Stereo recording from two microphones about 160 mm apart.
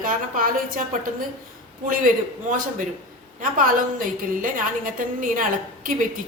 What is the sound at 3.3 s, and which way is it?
A woman's voice, 55° right (ahead or behind).